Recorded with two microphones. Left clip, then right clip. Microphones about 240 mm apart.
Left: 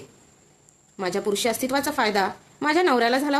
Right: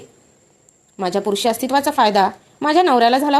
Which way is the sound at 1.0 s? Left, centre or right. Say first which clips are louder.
Right 5 dB; centre.